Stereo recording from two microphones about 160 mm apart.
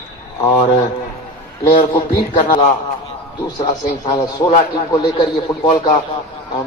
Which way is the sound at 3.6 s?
25° left (ahead or behind).